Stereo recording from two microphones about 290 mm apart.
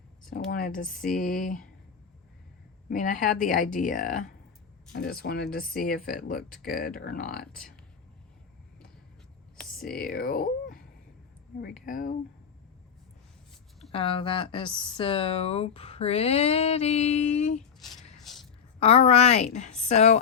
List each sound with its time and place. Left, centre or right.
0.3 s speech: left
2.9 s speech: left
10.0 s speech: left
13.9 s speech: centre
17.8 s a sound: centre
18.8 s speech: left